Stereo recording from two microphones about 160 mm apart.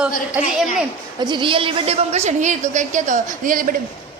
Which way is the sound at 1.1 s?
30° right (ahead or behind).